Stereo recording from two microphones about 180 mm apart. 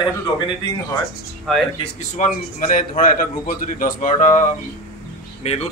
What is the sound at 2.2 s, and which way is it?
A man's voice, 45° left (ahead or behind).